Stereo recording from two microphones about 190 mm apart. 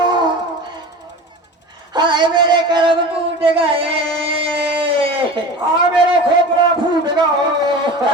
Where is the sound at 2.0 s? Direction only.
25° right (ahead or behind).